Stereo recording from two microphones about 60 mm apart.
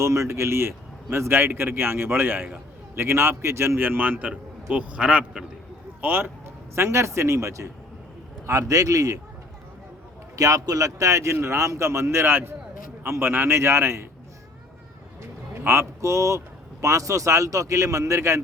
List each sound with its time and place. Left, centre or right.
0.0 s a man's voice: right
3.8 s a man's voice: right; by 5.5 s centre
6.0 s a man's voice: right
6.7 s a man's voice: right
10.3 s a man's voice: right
15.2 s a man's voice: right